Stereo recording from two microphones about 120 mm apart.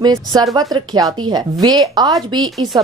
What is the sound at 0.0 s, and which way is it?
Speech, 35° right (ahead or behind).